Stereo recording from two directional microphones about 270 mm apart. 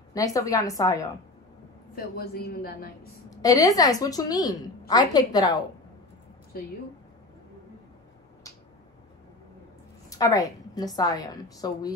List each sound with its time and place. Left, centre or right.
0.1 s a woman's voice: centre
2.0 s a woman's voice: left
3.3 s a woman's voice: centre
10.0 s a woman's voice: centre